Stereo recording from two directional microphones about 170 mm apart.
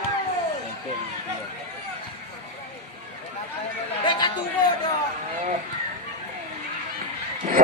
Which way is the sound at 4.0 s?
25° left (ahead or behind).